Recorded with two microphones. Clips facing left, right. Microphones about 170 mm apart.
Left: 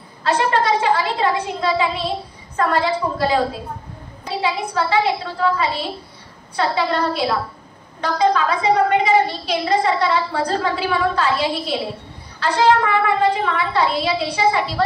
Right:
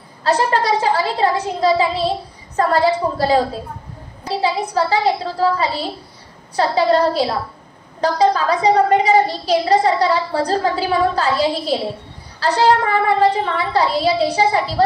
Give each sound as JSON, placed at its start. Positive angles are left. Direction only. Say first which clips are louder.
{"t": 0.2, "sound": "a sound", "louder": "right 1 dB", "side_deg": -35}
{"t": 2.5, "sound": "a woman's voice", "louder": "right 3 dB", "side_deg": -40}
{"t": 4.4, "sound": "a woman's voice", "louder": "right 3 dB", "side_deg": -40}